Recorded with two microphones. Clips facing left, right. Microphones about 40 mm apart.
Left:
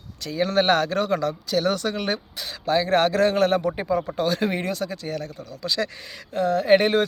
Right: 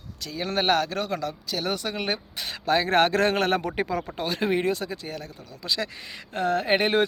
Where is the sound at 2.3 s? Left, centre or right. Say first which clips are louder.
Even; right.